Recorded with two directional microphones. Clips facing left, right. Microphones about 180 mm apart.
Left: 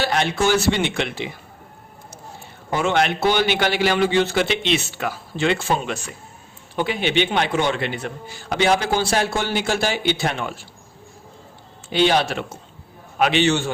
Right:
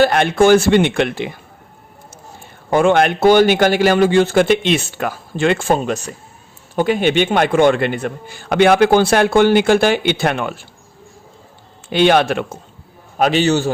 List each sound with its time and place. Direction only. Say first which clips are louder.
0.0 s a man's voice: right 8 dB; 55° right (ahead or behind)
2.6 s a man's voice: right 7 dB; 50° right (ahead or behind)
11.9 s a man's voice: right 5 dB; 60° right (ahead or behind)
13.1 s a man's voice: right 4 dB; 40° right (ahead or behind)